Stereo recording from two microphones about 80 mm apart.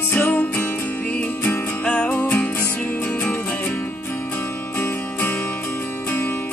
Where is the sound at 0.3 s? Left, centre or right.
Centre.